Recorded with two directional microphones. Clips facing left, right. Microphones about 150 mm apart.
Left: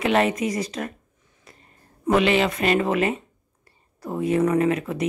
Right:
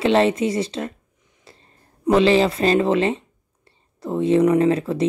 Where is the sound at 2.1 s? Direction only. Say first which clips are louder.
Right 4 dB; 30° right (ahead or behind).